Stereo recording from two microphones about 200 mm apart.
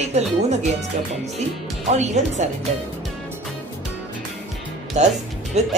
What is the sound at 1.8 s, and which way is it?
Speech, 35° right (ahead or behind).